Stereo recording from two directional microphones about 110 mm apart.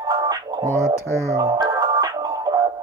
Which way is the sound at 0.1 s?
40° right (ahead or behind).